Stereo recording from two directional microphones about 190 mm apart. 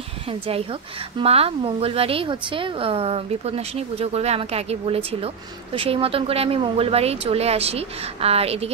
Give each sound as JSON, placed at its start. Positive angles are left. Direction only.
{"t": 0.3, "sound": "a woman's voice", "side_deg": -30}